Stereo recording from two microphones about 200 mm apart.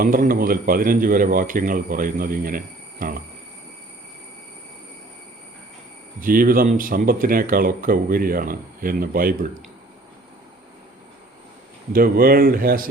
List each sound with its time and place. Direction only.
0.0 s speech: 45° right (ahead or behind)
6.1 s speech: 45° right (ahead or behind)
11.9 s speech: 45° right (ahead or behind)